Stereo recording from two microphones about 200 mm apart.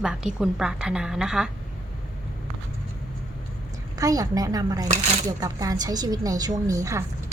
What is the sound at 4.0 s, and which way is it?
Speech, 15° right (ahead or behind).